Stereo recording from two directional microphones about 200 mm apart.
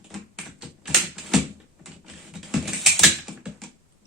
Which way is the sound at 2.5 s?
Centre (ahead or behind).